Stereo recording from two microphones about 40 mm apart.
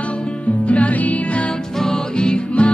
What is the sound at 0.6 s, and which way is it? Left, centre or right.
Music, left.